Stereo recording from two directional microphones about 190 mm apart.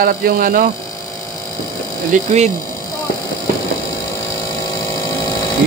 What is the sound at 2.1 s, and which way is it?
Speech, 35° right (ahead or behind).